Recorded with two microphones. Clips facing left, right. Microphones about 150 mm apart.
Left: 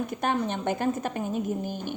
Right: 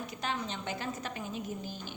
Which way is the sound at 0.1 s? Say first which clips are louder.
Left 9 dB; 55° left (ahead or behind).